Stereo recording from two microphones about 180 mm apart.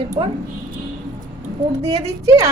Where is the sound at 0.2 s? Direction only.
30° right (ahead or behind).